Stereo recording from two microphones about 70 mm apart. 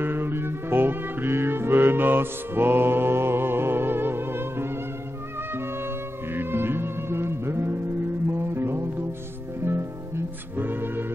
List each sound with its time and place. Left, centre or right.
0.0 s music: right